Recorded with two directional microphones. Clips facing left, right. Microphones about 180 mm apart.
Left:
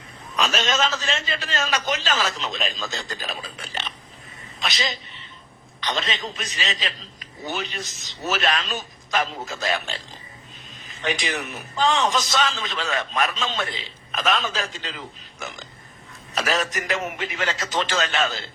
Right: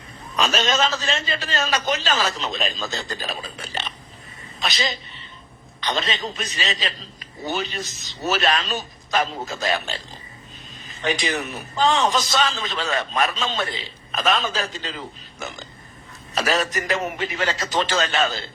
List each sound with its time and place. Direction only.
0.3 s a man's voice: 35° right (ahead or behind)
5.8 s a man's voice: 35° right (ahead or behind)
11.0 s a man's voice: 35° right (ahead or behind)